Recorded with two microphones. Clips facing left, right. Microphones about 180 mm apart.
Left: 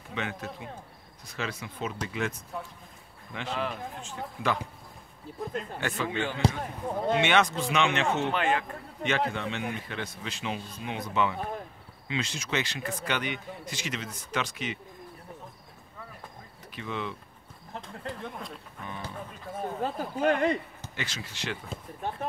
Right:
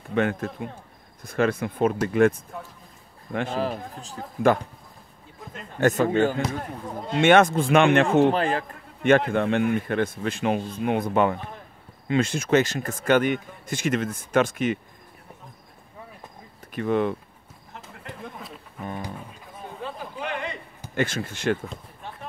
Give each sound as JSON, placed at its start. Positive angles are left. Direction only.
{"t": 0.1, "sound": "a man's voice", "side_deg": -50}
{"t": 3.6, "sound": "speech", "side_deg": -35}
{"t": 5.8, "sound": "a man's voice", "side_deg": -45}
{"t": 8.3, "sound": "speech", "side_deg": -35}
{"t": 9.0, "sound": "a man's voice", "side_deg": -50}
{"t": 16.7, "sound": "a man's voice", "side_deg": -50}
{"t": 18.2, "sound": "speech", "side_deg": -5}
{"t": 19.6, "sound": "a sound", "side_deg": 45}
{"t": 20.9, "sound": "a man's voice", "side_deg": -50}